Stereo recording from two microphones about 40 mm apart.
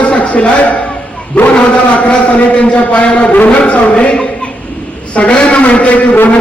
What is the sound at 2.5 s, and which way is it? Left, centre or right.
A man's voice, left.